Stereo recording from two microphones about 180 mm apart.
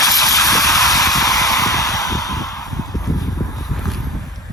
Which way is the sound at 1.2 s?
20° left (ahead or behind).